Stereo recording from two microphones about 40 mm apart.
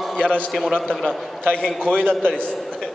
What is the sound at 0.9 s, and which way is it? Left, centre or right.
A man's voice, centre.